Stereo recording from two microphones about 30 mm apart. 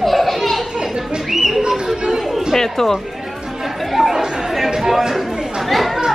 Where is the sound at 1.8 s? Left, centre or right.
Right.